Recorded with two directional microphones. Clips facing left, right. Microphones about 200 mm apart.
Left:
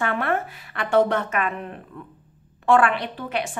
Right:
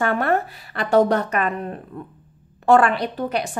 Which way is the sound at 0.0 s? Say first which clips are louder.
Right 4 dB; 40° right (ahead or behind).